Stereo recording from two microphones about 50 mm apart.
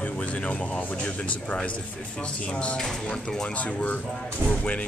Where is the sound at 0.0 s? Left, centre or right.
Left.